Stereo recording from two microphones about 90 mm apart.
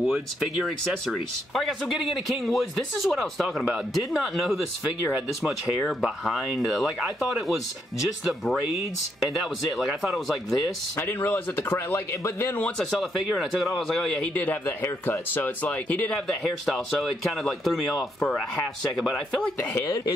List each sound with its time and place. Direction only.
0.0 s speech: 5° right (ahead or behind)
5.8 s speech: centre (ahead or behind)
9.2 s speech: centre (ahead or behind)
11.0 s speech: 25° left (ahead or behind)
13.1 s a man's voice: 5° right (ahead or behind); by 16.2 s 15° left (ahead or behind)
16.3 s speech: 5° left (ahead or behind)
19.4 s speech: 20° left (ahead or behind)